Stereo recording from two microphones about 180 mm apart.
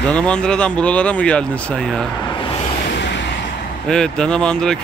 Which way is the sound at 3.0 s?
75° left (ahead or behind).